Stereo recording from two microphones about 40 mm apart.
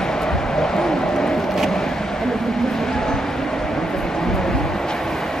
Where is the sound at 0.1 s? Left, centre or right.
Centre.